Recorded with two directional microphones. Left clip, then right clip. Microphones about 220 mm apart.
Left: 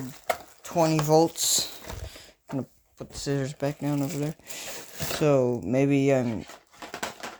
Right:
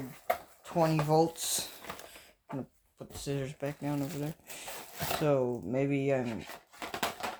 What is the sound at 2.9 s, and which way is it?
Speech, 40° left (ahead or behind).